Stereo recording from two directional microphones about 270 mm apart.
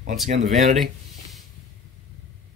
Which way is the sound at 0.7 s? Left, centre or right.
Centre.